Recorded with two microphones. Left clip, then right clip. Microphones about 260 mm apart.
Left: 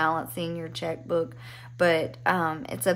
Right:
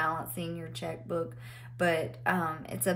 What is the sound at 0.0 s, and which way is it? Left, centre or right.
Speech, left.